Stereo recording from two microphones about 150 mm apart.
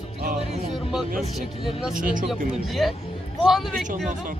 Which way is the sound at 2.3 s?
Centre (ahead or behind).